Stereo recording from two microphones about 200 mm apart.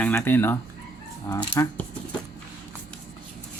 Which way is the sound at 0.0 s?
5° left (ahead or behind).